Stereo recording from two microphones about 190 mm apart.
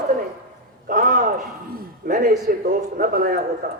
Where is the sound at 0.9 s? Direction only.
45° right (ahead or behind).